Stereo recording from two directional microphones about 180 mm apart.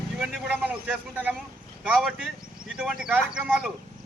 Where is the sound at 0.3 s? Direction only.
5° right (ahead or behind).